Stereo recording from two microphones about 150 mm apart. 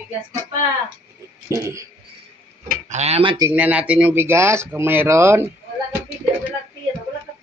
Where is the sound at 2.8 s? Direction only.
50° right (ahead or behind).